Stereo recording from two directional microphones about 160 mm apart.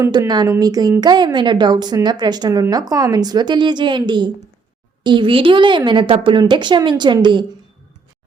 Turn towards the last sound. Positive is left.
turn(degrees=-30)  # may be behind; listen again after turning